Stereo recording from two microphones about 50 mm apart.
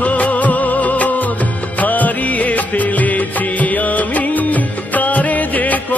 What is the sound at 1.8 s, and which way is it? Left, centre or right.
Music of bollywood, left.